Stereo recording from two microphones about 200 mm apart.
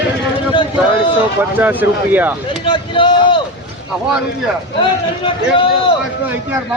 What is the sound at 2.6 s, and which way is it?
Speech, 25° left (ahead or behind).